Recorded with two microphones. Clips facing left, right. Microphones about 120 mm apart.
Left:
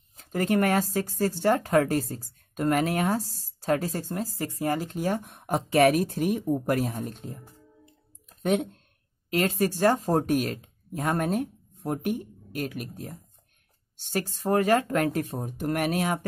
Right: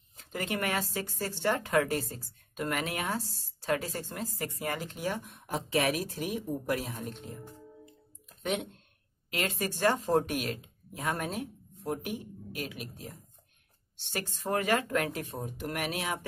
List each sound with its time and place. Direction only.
0.2 s speech: 40° left (ahead or behind)
8.4 s speech: 45° left (ahead or behind)